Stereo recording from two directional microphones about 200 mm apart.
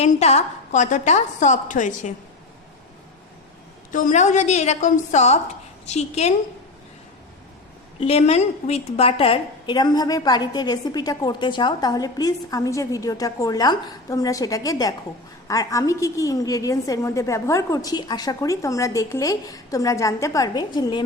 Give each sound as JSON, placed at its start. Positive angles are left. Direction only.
{"t": 0.0, "sound": "a woman's voice", "side_deg": 35}
{"t": 3.9, "sound": "a woman's voice", "side_deg": 40}
{"t": 7.9, "sound": "a woman's voice", "side_deg": 30}